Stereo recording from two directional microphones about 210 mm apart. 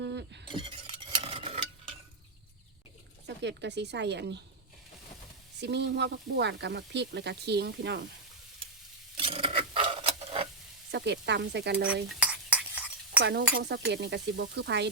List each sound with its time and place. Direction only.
0.0 s a sound: 55° right (ahead or behind)
0.5 s stir: 25° right (ahead or behind)
3.2 s speech: 55° right (ahead or behind)
5.5 s speech: 55° right (ahead or behind)
9.1 s a sound: 25° right (ahead or behind)
10.9 s speech: 55° right (ahead or behind)
12.0 s cutlery: 5° right (ahead or behind)
13.2 s speech: 55° right (ahead or behind)